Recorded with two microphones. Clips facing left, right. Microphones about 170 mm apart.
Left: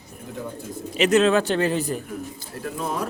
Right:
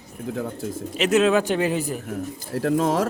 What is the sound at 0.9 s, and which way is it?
Speech, 5° right (ahead or behind).